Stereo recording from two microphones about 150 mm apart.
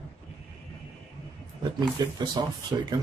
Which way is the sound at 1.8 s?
25° right (ahead or behind).